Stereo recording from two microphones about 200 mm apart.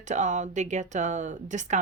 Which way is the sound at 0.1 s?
40° right (ahead or behind).